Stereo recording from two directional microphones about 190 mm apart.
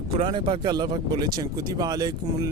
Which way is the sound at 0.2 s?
25° right (ahead or behind).